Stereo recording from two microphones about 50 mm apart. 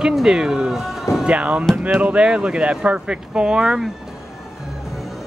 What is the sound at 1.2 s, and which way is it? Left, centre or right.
Music, right.